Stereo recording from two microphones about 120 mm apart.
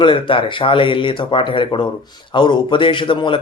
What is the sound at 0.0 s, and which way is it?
Speech, 45° left (ahead or behind).